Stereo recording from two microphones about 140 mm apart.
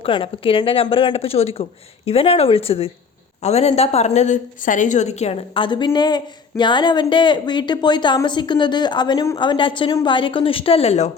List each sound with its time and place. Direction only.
0.0 s a woman's voice: 40° left (ahead or behind)